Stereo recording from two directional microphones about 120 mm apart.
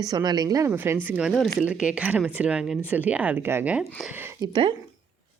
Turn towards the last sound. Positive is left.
turn(degrees=-40)  # may be behind; listen again after turning